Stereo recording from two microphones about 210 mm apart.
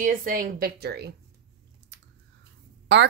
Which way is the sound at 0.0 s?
40° right (ahead or behind).